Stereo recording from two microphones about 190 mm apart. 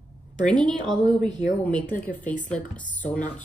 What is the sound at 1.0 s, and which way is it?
Speech, 25° right (ahead or behind).